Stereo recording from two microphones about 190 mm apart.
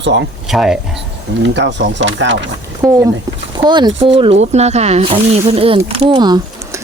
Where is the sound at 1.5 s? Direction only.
65° right (ahead or behind).